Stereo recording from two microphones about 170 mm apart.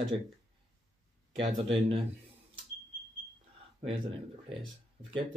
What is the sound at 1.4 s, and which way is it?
Speech, 35° right (ahead or behind).